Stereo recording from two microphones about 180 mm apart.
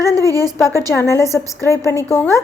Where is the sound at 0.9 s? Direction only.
15° left (ahead or behind).